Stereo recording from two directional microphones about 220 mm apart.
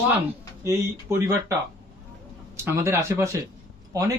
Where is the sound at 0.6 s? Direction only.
10° right (ahead or behind).